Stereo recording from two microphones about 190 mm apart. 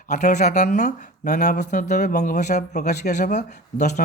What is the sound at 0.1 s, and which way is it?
Speech, 40° left (ahead or behind).